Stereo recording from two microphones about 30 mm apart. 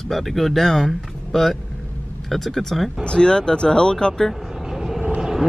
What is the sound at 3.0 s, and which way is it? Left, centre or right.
Speech, left.